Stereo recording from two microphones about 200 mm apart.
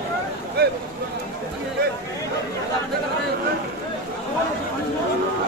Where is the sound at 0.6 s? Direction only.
50° right (ahead or behind).